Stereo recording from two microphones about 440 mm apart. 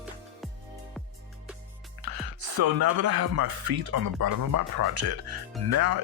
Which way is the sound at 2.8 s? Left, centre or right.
Right.